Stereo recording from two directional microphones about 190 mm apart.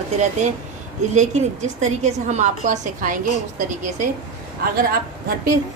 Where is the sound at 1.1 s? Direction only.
35° right (ahead or behind).